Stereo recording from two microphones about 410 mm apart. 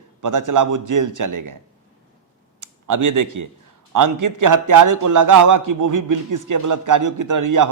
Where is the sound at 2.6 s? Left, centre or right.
Right.